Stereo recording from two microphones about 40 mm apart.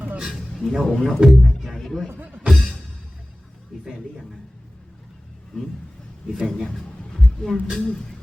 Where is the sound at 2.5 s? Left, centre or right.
Centre.